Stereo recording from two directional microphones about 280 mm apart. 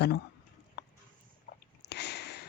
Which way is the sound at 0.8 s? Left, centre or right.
Left.